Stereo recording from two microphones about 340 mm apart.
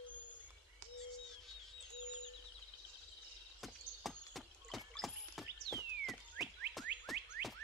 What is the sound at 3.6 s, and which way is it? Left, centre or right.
Horse, centre.